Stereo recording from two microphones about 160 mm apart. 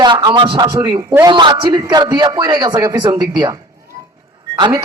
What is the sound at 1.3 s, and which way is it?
A man's voice, 30° right (ahead or behind).